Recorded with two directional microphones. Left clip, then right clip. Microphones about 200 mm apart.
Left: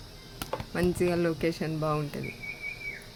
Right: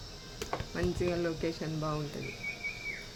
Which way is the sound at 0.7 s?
55° left (ahead or behind).